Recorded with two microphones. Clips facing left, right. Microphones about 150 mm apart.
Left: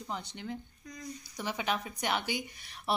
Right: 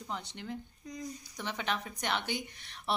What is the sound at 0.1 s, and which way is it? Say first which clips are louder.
A woman's voice: left 1 dB; centre (ahead or behind).